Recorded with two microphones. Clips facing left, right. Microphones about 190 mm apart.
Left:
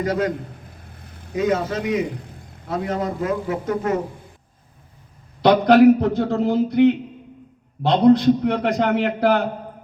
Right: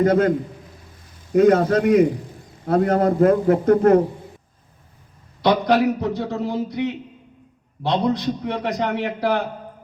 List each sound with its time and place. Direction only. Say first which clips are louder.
0.0 s a man's voice: right 5 dB; 50° right (ahead or behind)
0.9 s vehicle: left 6 dB; 60° left (ahead or behind)
1.3 s a man's voice: right 7 dB; 55° right (ahead or behind)
5.4 s a man's voice: left 5 dB; 55° left (ahead or behind)